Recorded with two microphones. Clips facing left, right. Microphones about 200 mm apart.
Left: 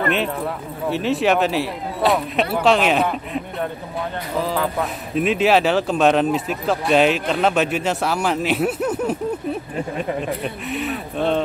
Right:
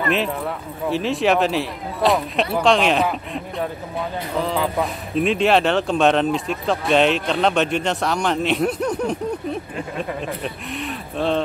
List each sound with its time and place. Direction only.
0.8 s speech: centre (ahead or behind)